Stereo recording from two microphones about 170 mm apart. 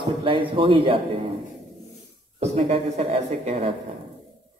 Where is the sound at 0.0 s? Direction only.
30° right (ahead or behind).